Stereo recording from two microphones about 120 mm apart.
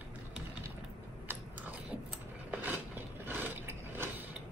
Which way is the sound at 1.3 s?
15° right (ahead or behind).